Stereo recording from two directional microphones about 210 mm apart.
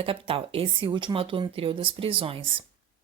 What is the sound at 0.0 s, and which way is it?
Speech, 25° right (ahead or behind).